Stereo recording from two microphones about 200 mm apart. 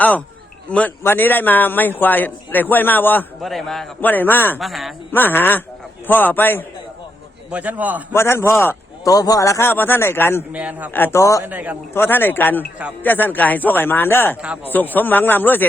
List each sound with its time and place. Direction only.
0.7 s a man's voice: 5° left (ahead or behind)
4.5 s speech: centre (ahead or behind)
5.1 s a man's voice: 10° left (ahead or behind)
7.5 s a man's voice: 5° right (ahead or behind)
8.1 s a man's voice: 10° left (ahead or behind)
10.5 s a man's voice: 5° right (ahead or behind)
10.9 s a man's voice: 10° left (ahead or behind)
11.4 s a man's voice: 10° right (ahead or behind)
11.9 s a man's voice: 10° left (ahead or behind)
14.4 s speech: 5° right (ahead or behind)
14.7 s a man's voice: 10° left (ahead or behind)